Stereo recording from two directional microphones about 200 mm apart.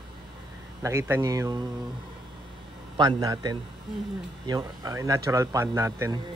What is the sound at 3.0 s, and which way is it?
Speech, 20° right (ahead or behind).